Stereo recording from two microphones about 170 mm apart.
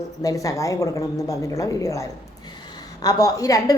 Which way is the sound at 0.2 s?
20° left (ahead or behind).